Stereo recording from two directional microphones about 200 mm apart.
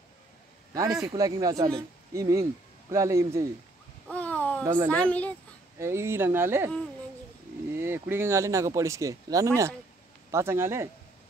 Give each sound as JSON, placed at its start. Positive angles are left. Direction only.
{"t": 1.0, "sound": "speech", "side_deg": -15}
{"t": 4.1, "sound": "a sound", "side_deg": 5}
{"t": 4.6, "sound": "speech", "side_deg": -10}
{"t": 4.9, "sound": "speech", "side_deg": 5}
{"t": 5.8, "sound": "speech", "side_deg": -15}
{"t": 7.7, "sound": "speech", "side_deg": -10}